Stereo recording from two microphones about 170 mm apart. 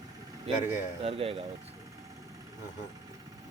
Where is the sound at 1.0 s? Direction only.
35° right (ahead or behind).